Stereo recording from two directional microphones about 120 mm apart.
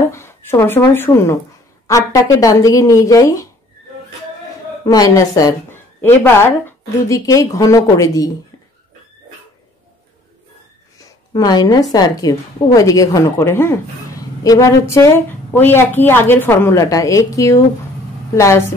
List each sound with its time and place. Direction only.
0.1 s a woman's voice: 20° left (ahead or behind)
4.8 s a woman's voice: 30° left (ahead or behind)
5.7 s a woman's voice: 20° left (ahead or behind)
11.0 s a woman's voice: 35° left (ahead or behind)